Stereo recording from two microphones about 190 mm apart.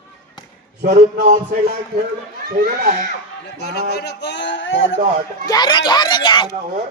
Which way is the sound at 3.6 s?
55° left (ahead or behind).